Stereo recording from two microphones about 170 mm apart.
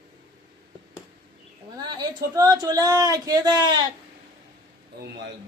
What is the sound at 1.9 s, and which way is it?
Speech, 20° right (ahead or behind).